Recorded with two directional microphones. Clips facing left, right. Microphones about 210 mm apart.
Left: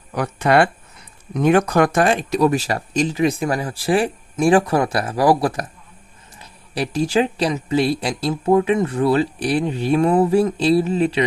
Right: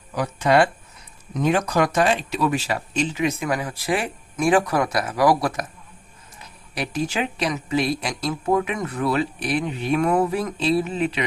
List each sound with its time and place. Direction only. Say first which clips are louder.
0.1 s speech: left 2 dB; 60° left (ahead or behind); by 11.3 s 35° left (ahead or behind)